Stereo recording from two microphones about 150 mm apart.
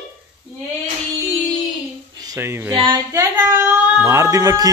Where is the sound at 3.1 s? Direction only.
15° right (ahead or behind).